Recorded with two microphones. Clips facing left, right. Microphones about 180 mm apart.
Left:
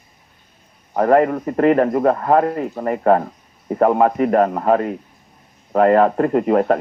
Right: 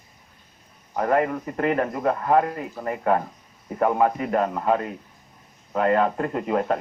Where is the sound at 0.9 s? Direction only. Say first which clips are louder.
Left 7 dB; 50° left (ahead or behind).